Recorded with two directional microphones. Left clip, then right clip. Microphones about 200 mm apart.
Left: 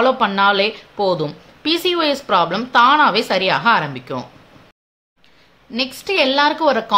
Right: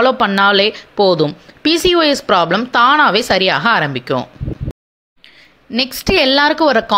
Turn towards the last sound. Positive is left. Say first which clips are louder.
# right 4 dB
turn(degrees=-30)  # may be behind; listen again after turning